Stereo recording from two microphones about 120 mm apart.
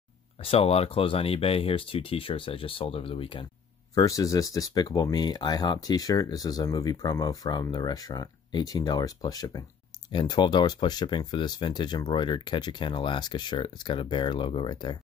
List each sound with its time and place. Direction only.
0.4 s speech: 55° left (ahead or behind)
3.9 s speech: 30° left (ahead or behind)